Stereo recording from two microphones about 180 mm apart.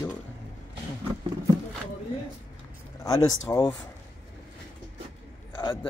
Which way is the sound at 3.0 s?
20° left (ahead or behind).